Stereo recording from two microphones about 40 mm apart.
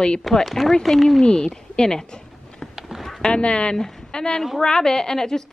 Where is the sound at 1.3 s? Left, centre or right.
Left.